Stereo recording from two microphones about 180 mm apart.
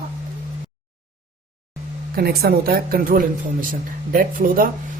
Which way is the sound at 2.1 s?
55° right (ahead or behind).